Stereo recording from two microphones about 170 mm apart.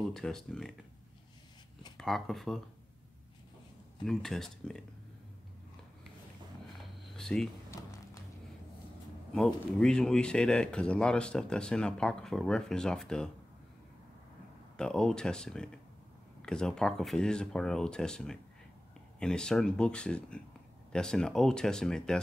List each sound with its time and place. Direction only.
0.1 s speech: 5° left (ahead or behind)
2.0 s speech: centre (ahead or behind)
4.0 s speech: centre (ahead or behind)
7.2 s speech: 5° left (ahead or behind)
7.7 s a sound: 20° left (ahead or behind)
9.3 s speech: 5° left (ahead or behind)
14.8 s speech: 5° left (ahead or behind)